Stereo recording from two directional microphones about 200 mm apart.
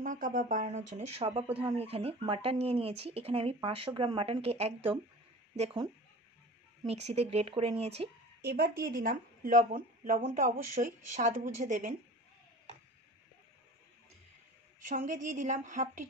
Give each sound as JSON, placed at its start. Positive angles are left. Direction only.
{"t": 0.0, "sound": "speech", "side_deg": -40}
{"t": 6.9, "sound": "speech", "side_deg": -30}
{"t": 8.4, "sound": "speech", "side_deg": -55}
{"t": 14.8, "sound": "speech", "side_deg": -40}